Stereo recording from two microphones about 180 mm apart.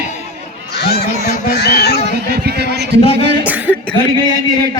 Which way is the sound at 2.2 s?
60° right (ahead or behind).